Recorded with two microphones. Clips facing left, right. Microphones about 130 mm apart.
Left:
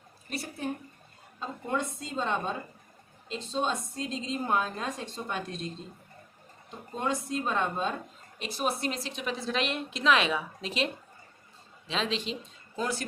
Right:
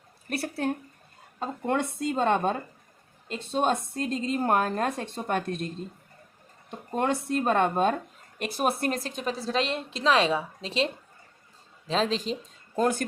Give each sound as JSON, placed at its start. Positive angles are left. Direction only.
{"t": 0.3, "sound": "a woman's voice", "side_deg": -60}
{"t": 6.7, "sound": "a woman's voice", "side_deg": -60}
{"t": 11.9, "sound": "speech", "side_deg": -40}